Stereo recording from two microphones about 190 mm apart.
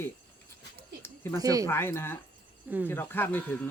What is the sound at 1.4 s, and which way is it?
Speech, 20° right (ahead or behind).